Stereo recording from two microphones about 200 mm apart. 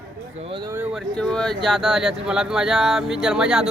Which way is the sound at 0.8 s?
Centre (ahead or behind).